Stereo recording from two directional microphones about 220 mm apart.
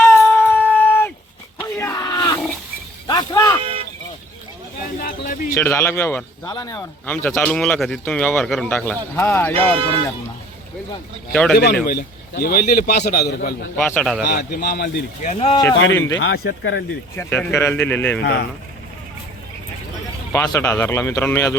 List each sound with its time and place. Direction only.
0.0 s wind instrument: 10° left (ahead or behind)
1.5 s a sound: 10° left (ahead or behind)
3.6 s cattle: 25° right (ahead or behind)
4.9 s a sound: 40° left (ahead or behind)
5.5 s speech: 10° left (ahead or behind)
9.6 s speech: 25° right (ahead or behind)
11.3 s a man's voice: 5° left (ahead or behind)
11.5 s a man's voice: 45° left (ahead or behind)
13.7 s a man's voice: 5° left (ahead or behind)
14.3 s a man's voice: 45° left (ahead or behind)
15.3 s speech: 25° left (ahead or behind)
16.1 s speech: 60° left (ahead or behind)
17.2 s speech: 10° left (ahead or behind)
20.3 s speech: 15° left (ahead or behind)